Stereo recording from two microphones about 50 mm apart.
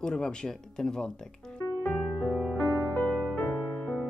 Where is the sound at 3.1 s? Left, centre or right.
Left.